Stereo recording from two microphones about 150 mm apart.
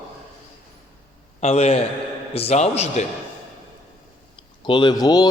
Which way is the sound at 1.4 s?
45° left (ahead or behind).